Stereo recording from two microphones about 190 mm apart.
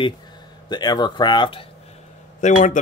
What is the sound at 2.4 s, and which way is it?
Speech, 40° left (ahead or behind).